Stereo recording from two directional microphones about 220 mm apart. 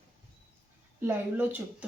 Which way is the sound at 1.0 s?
10° right (ahead or behind).